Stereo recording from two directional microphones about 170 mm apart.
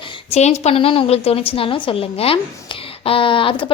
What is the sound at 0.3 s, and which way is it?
A woman's voice, 40° left (ahead or behind).